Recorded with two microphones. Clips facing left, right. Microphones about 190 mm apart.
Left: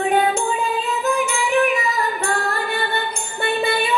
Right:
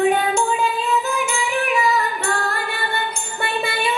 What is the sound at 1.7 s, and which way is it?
Female singing, 35° left (ahead or behind).